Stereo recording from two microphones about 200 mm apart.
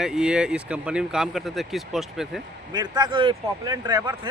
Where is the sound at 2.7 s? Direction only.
20° right (ahead or behind).